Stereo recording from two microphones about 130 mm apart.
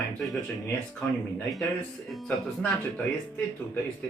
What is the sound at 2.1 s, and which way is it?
Music, centre (ahead or behind).